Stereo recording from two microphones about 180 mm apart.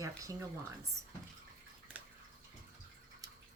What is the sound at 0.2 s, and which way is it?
Speech, 20° right (ahead or behind).